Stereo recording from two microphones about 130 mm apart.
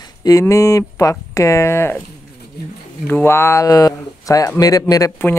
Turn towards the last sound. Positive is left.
turn(degrees=20)  # may be behind; listen again after turning